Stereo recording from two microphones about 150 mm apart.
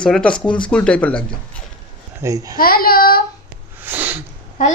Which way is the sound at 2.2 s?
25° right (ahead or behind).